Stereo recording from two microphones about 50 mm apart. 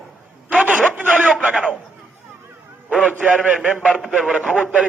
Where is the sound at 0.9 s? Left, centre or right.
Right.